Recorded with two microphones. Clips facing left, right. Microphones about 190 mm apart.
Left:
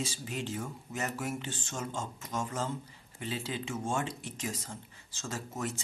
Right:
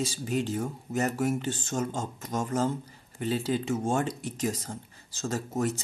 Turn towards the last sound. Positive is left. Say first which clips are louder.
# right 8 dB
turn(degrees=-40)  # may be behind; listen again after turning